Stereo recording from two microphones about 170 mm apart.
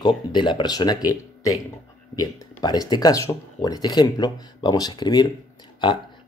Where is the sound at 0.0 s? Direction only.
25° left (ahead or behind).